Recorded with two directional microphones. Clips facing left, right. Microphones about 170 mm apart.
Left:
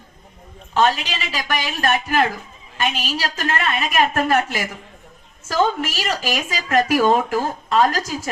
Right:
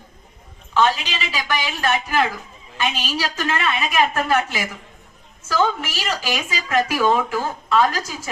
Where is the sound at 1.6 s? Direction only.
45° left (ahead or behind).